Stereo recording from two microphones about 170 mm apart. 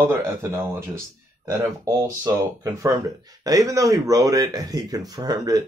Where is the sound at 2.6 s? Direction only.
20° right (ahead or behind).